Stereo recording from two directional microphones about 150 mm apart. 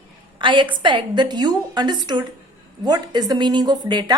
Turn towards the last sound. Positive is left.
turn(degrees=-30)  # may be behind; listen again after turning